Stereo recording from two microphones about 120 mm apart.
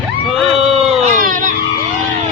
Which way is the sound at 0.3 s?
Centre (ahead or behind).